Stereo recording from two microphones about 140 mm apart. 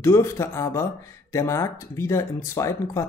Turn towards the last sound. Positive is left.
turn(degrees=20)  # may be behind; listen again after turning